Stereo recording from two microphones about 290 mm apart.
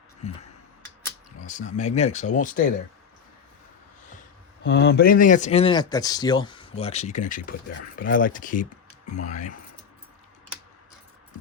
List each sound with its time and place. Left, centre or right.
1.5 s speech: left
4.6 s speech: left